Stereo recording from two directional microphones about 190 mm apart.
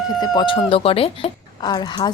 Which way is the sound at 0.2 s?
25° left (ahead or behind).